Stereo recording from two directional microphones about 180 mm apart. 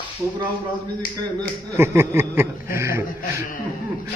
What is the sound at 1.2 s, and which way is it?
A man's voice, 15° right (ahead or behind).